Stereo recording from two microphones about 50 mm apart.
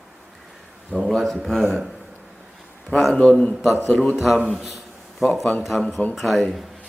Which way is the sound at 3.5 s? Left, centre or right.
Centre.